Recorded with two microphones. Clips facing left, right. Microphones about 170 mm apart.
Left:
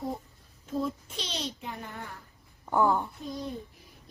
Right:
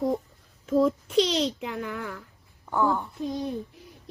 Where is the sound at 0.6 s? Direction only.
85° right.